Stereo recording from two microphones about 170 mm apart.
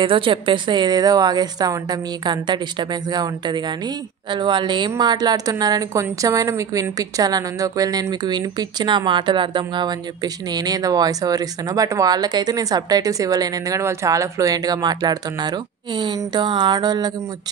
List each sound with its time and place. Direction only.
0.0 s a woman's voice: 30° right (ahead or behind)